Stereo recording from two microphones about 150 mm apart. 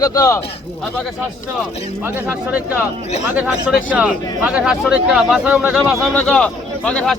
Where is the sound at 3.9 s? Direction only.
10° right (ahead or behind).